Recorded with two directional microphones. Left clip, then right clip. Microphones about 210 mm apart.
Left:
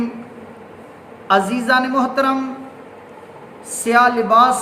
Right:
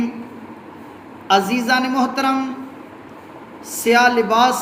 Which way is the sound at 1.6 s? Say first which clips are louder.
Left 2 dB; 15° left (ahead or behind).